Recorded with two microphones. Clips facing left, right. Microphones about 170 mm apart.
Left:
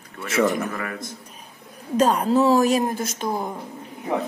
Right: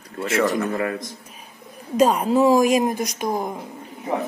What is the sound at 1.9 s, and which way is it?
A woman's voice, 10° right (ahead or behind).